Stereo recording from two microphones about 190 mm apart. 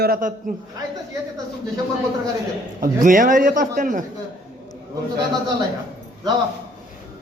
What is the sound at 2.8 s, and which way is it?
A man's voice, 45° right (ahead or behind).